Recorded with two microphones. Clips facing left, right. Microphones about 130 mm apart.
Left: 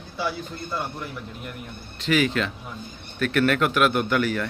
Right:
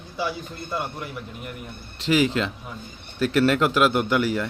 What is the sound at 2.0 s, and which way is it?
Speech, 25° right (ahead or behind).